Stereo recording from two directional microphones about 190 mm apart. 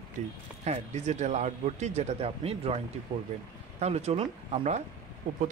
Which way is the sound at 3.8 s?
35° right (ahead or behind).